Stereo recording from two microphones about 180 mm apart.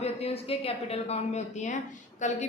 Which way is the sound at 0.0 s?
35° left (ahead or behind).